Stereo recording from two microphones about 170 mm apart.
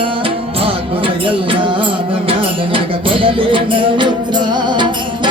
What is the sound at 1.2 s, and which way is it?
Music, 30° right (ahead or behind).